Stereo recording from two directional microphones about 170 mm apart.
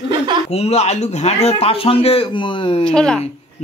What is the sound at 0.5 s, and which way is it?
A man's voice, 40° left (ahead or behind).